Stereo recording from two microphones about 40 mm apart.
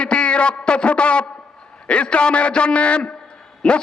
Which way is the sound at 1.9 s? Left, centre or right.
Left.